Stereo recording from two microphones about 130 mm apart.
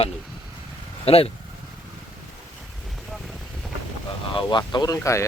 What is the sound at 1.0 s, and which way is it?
Speech, 50° left (ahead or behind).